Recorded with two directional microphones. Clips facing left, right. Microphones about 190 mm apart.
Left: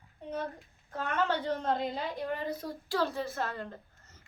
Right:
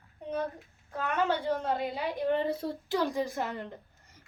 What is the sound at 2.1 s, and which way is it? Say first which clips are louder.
A woman's voice: right 6 dB; 25° right (ahead or behind).